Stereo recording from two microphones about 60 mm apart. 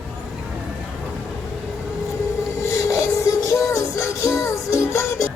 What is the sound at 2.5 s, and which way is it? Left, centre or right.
Music, left.